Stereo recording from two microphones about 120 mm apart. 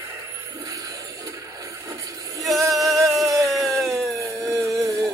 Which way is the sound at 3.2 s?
25° right (ahead or behind).